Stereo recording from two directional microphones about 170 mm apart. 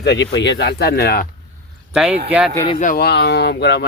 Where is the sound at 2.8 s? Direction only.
60° left (ahead or behind); by 3.8 s 75° left (ahead or behind).